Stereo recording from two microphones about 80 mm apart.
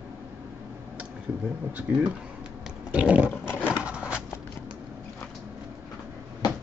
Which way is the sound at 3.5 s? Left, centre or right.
Left.